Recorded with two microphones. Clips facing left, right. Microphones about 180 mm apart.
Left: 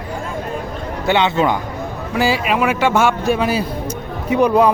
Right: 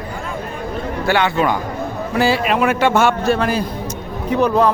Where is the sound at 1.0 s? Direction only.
20° left (ahead or behind).